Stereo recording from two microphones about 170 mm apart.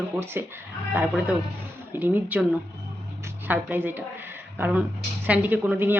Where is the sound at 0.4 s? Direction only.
10° right (ahead or behind).